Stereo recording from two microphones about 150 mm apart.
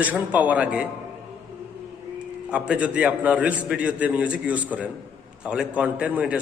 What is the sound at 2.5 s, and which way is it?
A man's voice, 5° right (ahead or behind).